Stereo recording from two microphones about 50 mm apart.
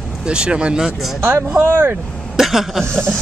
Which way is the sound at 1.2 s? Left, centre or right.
Right.